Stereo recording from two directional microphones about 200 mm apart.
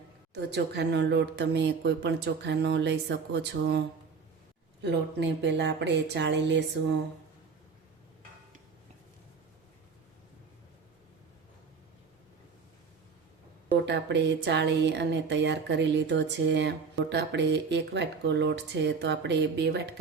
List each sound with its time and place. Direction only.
0.3 s speech: 55° right (ahead or behind)
13.8 s speech: 60° right (ahead or behind)